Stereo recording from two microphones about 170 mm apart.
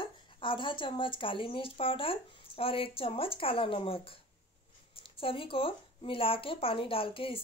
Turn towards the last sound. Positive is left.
turn(degrees=30)  # may be behind; listen again after turning